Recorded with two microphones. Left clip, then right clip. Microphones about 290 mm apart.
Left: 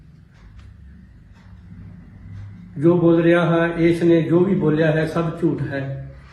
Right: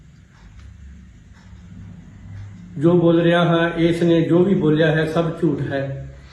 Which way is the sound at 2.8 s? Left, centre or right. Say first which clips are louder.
Even; centre.